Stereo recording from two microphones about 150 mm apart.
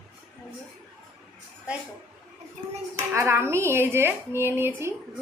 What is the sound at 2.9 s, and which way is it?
Speech, 20° right (ahead or behind).